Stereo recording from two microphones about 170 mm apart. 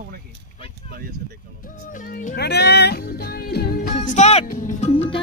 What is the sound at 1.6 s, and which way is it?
Music, 50° left (ahead or behind).